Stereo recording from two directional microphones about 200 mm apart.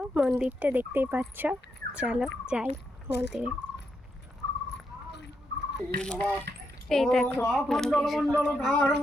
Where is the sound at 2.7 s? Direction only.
55° left (ahead or behind).